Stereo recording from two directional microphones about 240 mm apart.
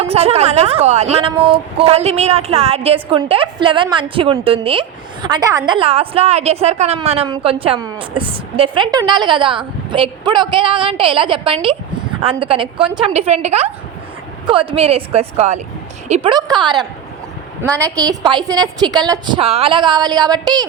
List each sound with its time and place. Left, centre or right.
0.0 s a woman's voice: right
18.0 s a woman's voice: centre